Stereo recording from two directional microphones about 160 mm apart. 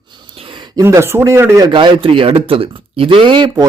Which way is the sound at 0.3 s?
30° right (ahead or behind).